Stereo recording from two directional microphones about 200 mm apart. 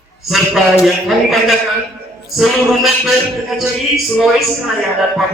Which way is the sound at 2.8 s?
Centre (ahead or behind).